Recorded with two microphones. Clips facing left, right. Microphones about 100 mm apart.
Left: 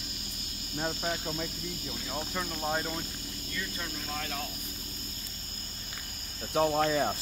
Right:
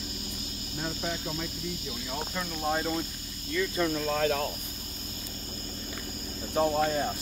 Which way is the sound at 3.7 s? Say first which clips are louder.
Right 10 dB; 70° right (ahead or behind).